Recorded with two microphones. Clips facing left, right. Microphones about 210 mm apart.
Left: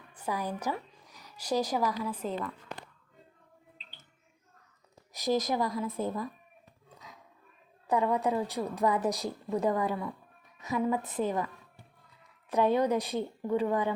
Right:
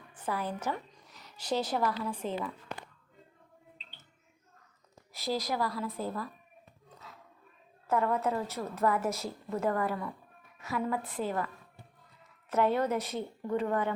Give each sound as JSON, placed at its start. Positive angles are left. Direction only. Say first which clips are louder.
{"t": 0.3, "sound": "a woman's voice", "louder": "left 1 dB", "side_deg": 15}
{"t": 1.1, "sound": "a sound", "louder": "left 2 dB", "side_deg": 10}
{"t": 1.7, "sound": "a woman's voice", "louder": "left 1 dB", "side_deg": 10}
{"t": 5.1, "sound": "a woman's voice", "louder": "left 4 dB", "side_deg": 20}
{"t": 7.9, "sound": "a woman's voice", "louder": "left 2 dB", "side_deg": 15}